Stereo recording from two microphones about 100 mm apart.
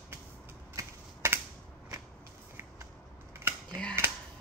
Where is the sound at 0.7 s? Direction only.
25° right (ahead or behind).